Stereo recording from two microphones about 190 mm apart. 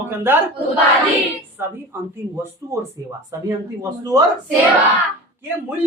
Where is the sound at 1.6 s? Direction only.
10° right (ahead or behind).